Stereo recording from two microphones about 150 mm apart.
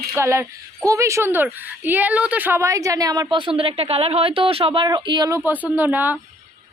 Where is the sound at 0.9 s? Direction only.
20° right (ahead or behind).